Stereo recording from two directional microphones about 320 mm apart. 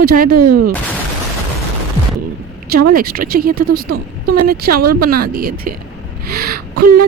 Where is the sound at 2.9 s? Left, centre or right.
Right.